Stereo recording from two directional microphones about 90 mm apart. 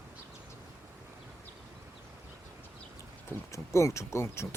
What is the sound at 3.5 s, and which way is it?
Speech, 35° left (ahead or behind).